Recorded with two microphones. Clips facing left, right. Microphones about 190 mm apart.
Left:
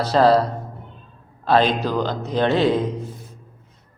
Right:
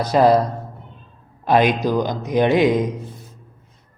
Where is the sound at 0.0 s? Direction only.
15° right (ahead or behind).